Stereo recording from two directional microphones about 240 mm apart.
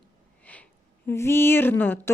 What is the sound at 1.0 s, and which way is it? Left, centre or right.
Speech, centre.